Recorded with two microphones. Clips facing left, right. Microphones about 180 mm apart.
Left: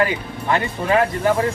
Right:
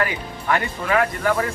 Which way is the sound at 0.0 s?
25° left (ahead or behind).